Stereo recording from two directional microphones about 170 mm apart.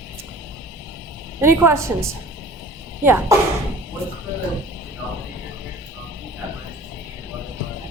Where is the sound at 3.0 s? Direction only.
15° right (ahead or behind).